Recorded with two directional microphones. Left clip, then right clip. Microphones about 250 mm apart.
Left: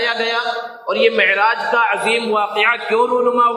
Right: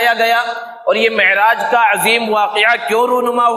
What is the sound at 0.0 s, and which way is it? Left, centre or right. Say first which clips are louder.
A man's voice: right 5 dB; right.